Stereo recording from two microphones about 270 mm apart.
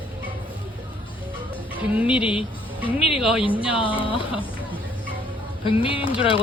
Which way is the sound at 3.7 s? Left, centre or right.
Centre.